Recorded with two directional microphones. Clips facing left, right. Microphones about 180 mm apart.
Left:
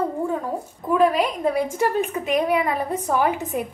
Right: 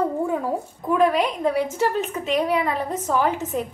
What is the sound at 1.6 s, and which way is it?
A woman's voice, 10° left (ahead or behind).